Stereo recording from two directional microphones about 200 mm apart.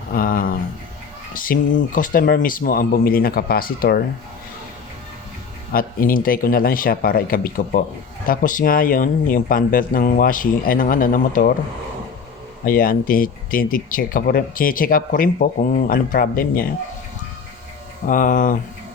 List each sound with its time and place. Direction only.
0.1 s speech: 45° left (ahead or behind)
5.7 s speech: 45° left (ahead or behind)
12.6 s speech: 45° left (ahead or behind)
18.0 s speech: 40° left (ahead or behind)